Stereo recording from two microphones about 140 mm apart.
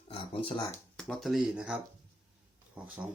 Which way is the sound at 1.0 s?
5° left (ahead or behind).